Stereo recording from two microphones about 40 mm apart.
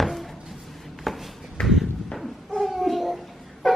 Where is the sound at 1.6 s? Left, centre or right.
Left.